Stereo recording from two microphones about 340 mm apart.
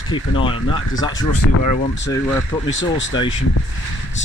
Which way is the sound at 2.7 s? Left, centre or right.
Left.